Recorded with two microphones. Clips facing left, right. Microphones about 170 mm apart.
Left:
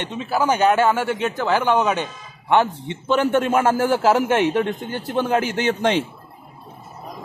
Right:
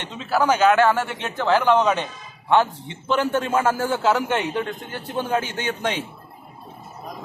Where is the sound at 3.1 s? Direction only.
20° left (ahead or behind).